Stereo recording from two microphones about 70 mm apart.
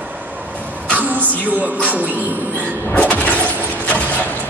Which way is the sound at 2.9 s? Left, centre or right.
Left.